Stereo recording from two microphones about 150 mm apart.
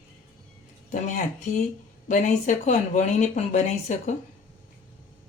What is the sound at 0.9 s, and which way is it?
Speech, 55° left (ahead or behind).